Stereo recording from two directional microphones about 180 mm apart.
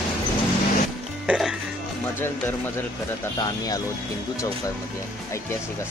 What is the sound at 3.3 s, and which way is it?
Speech, 20° left (ahead or behind).